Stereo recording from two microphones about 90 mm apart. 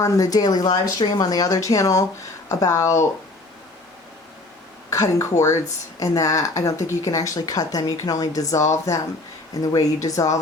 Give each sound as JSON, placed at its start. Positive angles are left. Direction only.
{"t": 0.0, "sound": "a woman's voice", "side_deg": 40}
{"t": 4.9, "sound": "a woman's voice", "side_deg": 35}